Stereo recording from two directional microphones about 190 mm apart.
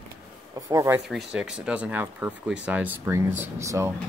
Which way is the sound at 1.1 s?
Centre (ahead or behind).